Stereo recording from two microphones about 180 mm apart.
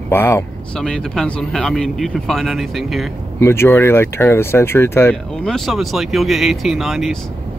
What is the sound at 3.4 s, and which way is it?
Speech, 15° left (ahead or behind).